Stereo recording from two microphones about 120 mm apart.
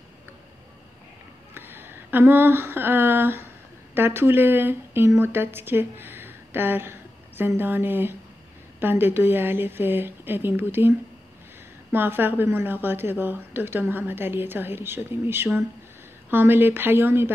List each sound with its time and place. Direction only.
1.5 s a sound: 15° right (ahead or behind)
3.9 s a woman's voice: 20° right (ahead or behind)
11.9 s speech: 15° right (ahead or behind)